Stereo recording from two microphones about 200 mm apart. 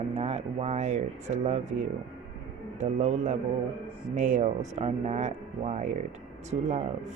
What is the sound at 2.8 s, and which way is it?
Speech, 35° right (ahead or behind).